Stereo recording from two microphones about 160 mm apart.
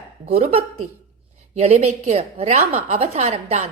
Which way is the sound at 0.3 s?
40° right (ahead or behind).